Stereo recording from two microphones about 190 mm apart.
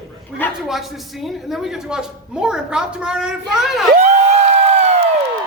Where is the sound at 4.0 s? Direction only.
35° right (ahead or behind).